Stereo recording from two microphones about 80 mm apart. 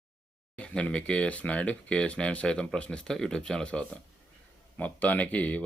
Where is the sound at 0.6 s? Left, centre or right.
Centre.